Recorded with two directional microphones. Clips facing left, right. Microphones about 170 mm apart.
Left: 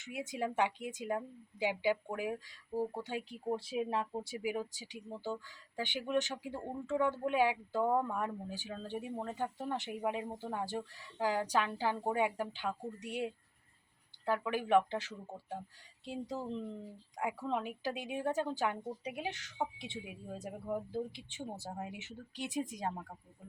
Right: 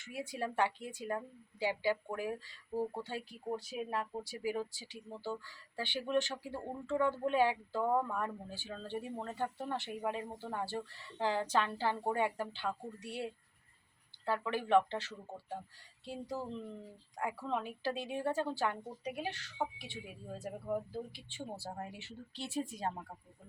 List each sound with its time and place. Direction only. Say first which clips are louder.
0.1 s speech: left 2 dB; 20° left (ahead or behind)